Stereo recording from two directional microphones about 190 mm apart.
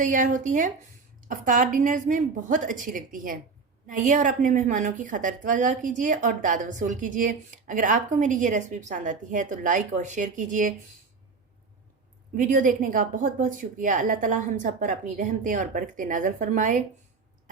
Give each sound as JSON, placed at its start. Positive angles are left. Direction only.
{"t": 0.0, "sound": "a woman's voice", "side_deg": -45}
{"t": 12.3, "sound": "a woman's voice", "side_deg": -45}